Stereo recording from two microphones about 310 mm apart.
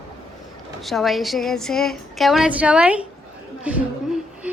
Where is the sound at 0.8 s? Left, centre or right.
Centre.